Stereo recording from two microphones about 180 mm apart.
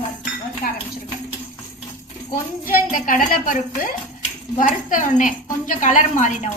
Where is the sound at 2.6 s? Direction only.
50° left (ahead or behind).